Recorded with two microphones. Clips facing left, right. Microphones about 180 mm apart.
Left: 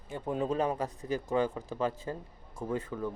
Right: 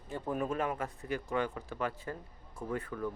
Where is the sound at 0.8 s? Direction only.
35° left (ahead or behind).